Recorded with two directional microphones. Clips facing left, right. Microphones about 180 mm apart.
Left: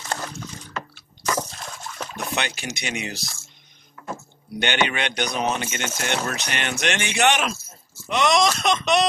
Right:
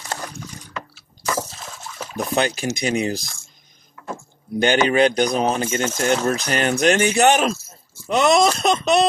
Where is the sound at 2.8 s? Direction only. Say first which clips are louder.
Right 10 dB; 35° right (ahead or behind).